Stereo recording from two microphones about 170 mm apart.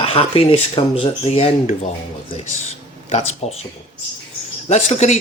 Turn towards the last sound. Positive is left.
turn(degrees=40)  # may be behind; listen again after turning